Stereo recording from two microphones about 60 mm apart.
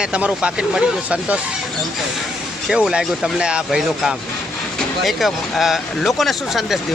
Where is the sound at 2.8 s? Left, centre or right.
Centre.